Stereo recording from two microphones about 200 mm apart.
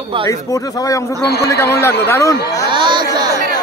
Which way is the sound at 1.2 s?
55° left (ahead or behind).